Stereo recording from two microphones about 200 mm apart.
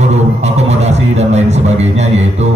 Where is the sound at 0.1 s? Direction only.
35° right (ahead or behind).